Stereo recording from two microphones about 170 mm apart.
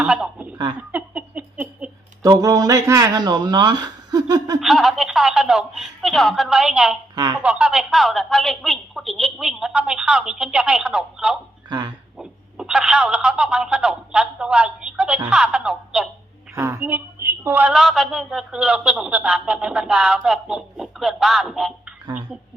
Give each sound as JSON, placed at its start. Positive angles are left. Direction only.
{"t": 0.0, "sound": "speech", "side_deg": -5}
{"t": 0.8, "sound": "a sound", "side_deg": -10}
{"t": 2.2, "sound": "speech", "side_deg": -20}
{"t": 4.6, "sound": "a sound", "side_deg": 0}
{"t": 7.3, "sound": "a woman's voice", "side_deg": -5}
{"t": 11.7, "sound": "speech", "side_deg": -25}
{"t": 12.1, "sound": "telephone", "side_deg": -5}
{"t": 15.3, "sound": "a woman's voice", "side_deg": -5}
{"t": 16.6, "sound": "a woman's voice", "side_deg": -15}